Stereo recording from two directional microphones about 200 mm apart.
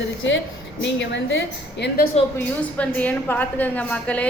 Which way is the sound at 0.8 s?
65° left (ahead or behind).